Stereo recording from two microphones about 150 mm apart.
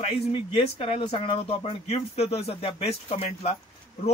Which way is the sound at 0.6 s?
40° left (ahead or behind).